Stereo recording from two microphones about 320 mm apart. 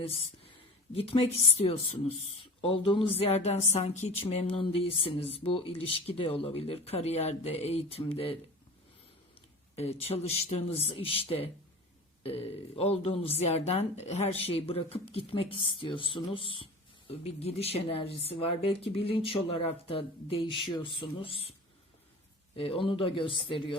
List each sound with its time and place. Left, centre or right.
0.0 s speech: centre
9.7 s speech: centre
22.5 s speech: centre